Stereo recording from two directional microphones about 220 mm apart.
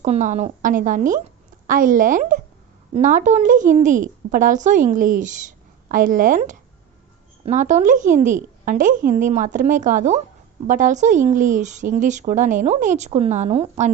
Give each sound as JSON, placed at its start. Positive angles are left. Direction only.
{"t": 0.0, "sound": "a woman's voice", "side_deg": -35}